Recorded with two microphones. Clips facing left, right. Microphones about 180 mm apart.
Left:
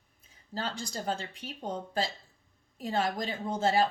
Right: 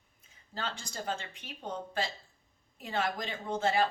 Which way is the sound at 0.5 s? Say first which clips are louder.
Left 3 dB; 40° left (ahead or behind).